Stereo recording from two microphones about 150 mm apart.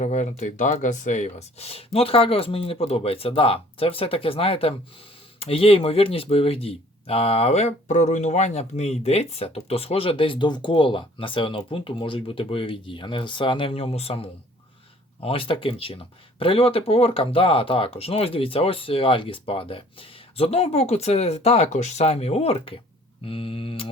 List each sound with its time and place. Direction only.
0.0 s speech: 55° left (ahead or behind); by 23.9 s 40° left (ahead or behind)